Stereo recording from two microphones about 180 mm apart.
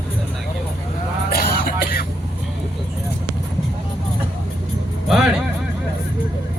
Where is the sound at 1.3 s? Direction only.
60° left (ahead or behind).